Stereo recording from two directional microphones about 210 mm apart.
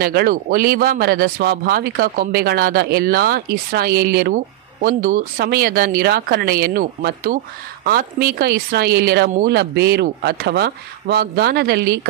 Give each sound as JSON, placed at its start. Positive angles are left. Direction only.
{"t": 0.0, "sound": "speech", "side_deg": -45}